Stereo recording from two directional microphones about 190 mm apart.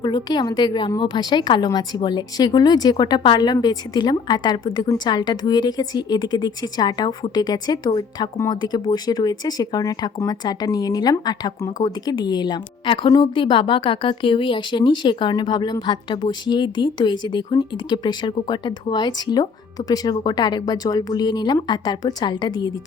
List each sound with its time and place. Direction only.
0.0 s a woman's voice: 20° left (ahead or behind)